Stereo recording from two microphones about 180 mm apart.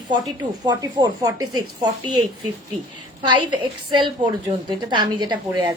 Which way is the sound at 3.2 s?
25° right (ahead or behind).